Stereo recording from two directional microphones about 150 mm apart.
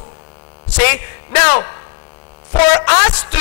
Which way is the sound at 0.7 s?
15° left (ahead or behind).